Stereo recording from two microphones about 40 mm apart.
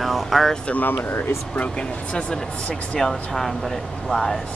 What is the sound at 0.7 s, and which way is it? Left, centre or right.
Vehicle, left.